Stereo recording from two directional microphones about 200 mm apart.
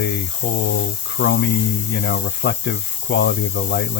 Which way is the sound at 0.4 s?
45° left (ahead or behind).